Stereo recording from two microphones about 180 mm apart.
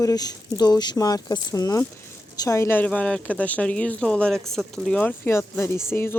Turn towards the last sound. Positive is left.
turn(degrees=15)  # may be behind; listen again after turning